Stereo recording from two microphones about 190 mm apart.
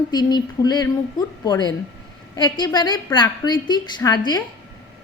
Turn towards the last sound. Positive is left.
turn(degrees=20)  # may be behind; listen again after turning